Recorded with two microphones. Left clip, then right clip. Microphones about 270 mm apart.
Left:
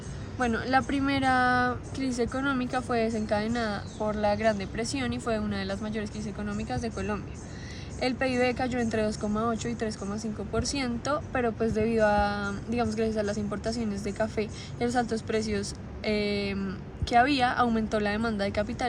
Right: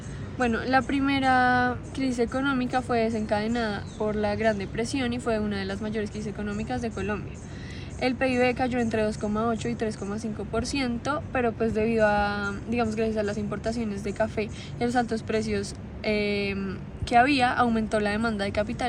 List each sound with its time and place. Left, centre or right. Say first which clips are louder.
0.4 s speech: right 2 dB; left